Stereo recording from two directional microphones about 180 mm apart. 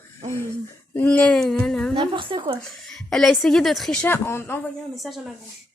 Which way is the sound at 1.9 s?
25° right (ahead or behind).